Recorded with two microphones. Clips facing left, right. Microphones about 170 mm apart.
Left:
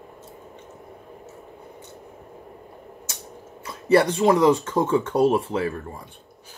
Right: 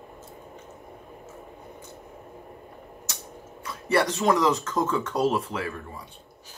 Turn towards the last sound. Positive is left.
turn(degrees=30)  # may be behind; listen again after turning